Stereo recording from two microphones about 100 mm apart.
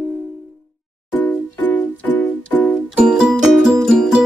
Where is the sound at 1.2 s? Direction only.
20° left (ahead or behind).